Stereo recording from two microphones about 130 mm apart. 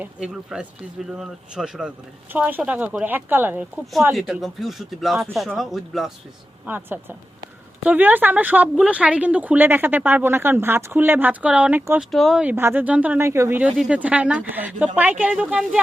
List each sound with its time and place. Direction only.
0.0 s a woman's voice: 10° right (ahead or behind)
4.1 s speech: centre (ahead or behind)
6.7 s a woman's voice: 15° right (ahead or behind)
13.6 s a woman's voice: 5° right (ahead or behind)